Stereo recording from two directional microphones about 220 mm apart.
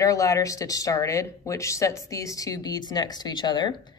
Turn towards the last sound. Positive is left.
turn(degrees=20)  # may be behind; listen again after turning